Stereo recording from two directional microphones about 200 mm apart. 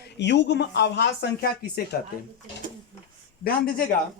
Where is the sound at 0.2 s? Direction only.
60° left (ahead or behind).